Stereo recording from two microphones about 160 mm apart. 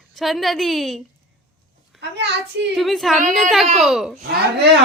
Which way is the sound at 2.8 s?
Centre (ahead or behind).